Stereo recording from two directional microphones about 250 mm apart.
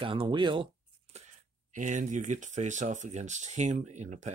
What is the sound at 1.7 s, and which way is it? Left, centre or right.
Speech, right.